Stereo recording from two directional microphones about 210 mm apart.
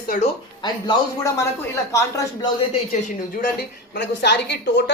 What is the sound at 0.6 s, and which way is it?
Speech, 20° left (ahead or behind).